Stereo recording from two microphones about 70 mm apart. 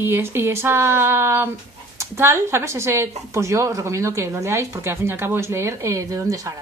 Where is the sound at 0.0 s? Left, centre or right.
Right.